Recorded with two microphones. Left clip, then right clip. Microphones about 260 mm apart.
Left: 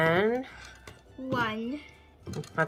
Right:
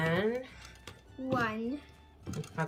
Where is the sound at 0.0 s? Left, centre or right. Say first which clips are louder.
Left 7 dB; centre.